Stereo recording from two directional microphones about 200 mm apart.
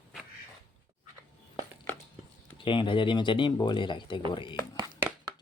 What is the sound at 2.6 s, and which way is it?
Speech, 25° left (ahead or behind).